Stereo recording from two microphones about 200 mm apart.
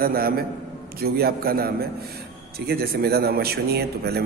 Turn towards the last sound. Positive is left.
turn(degrees=-55)  # may be behind; listen again after turning